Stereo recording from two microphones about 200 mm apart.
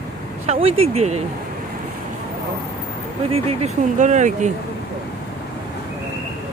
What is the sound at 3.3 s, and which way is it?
Speech, 35° right (ahead or behind).